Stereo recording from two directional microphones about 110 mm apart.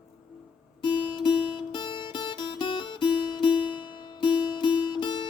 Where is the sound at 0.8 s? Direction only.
45° left (ahead or behind).